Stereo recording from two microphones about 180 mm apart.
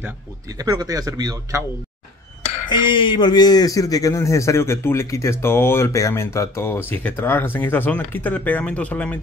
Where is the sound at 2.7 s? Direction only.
25° left (ahead or behind).